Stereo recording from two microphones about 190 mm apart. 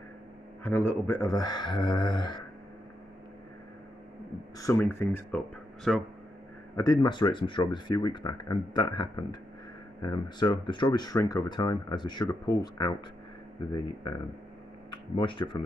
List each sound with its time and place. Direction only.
0.7 s speech: 10° left (ahead or behind)
4.6 s speech: 15° left (ahead or behind)
5.9 s speech: centre (ahead or behind)
6.8 s speech: 20° left (ahead or behind)